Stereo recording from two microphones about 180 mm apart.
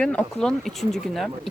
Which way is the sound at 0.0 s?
5° left (ahead or behind).